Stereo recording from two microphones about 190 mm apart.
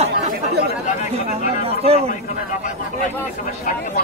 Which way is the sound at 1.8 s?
30° right (ahead or behind).